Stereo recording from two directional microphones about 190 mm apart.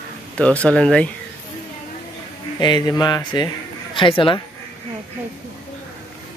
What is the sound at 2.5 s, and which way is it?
Music, 25° left (ahead or behind).